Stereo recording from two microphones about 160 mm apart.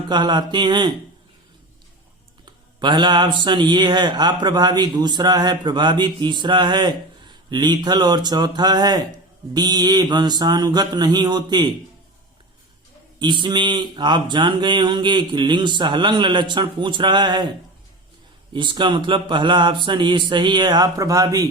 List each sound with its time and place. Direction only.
0.1 s speech: 30° right (ahead or behind)
2.4 s speech: 30° right (ahead or behind)
13.1 s speech: 30° right (ahead or behind)
18.5 s speech: 30° right (ahead or behind)